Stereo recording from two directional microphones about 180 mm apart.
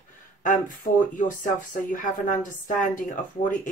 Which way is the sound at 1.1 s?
45° left (ahead or behind).